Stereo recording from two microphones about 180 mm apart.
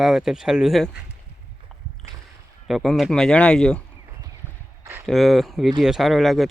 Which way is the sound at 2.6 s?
Centre (ahead or behind).